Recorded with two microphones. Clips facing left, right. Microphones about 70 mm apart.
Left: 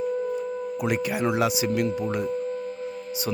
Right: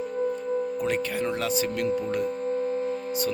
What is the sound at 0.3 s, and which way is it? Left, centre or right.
Speech, centre.